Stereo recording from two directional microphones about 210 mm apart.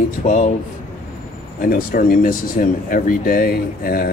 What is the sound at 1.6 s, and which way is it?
Speech, 45° left (ahead or behind).